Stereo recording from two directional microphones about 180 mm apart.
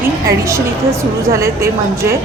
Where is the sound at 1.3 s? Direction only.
15° right (ahead or behind).